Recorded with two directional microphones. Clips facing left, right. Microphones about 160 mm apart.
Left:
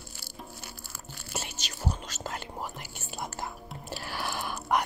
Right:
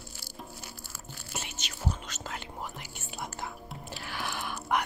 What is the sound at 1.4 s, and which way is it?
Whispering, 40° left (ahead or behind).